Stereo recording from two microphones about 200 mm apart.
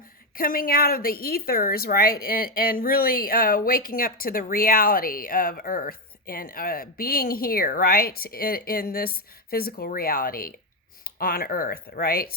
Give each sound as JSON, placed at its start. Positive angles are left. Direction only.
{"t": 0.3, "sound": "speech", "side_deg": 45}